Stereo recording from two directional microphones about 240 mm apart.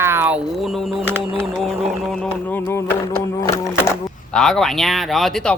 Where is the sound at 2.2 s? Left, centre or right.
Centre.